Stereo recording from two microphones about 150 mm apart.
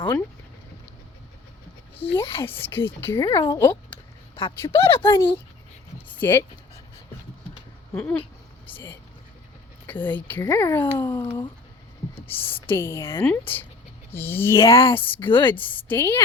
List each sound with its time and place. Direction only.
2.4 s speech: 15° left (ahead or behind)
3.9 s a sound: 40° left (ahead or behind)
4.6 s speech: 15° left (ahead or behind)
7.9 s speech: 10° left (ahead or behind)
11.0 s speech: 25° left (ahead or behind)
12.3 s speech: 15° left (ahead or behind)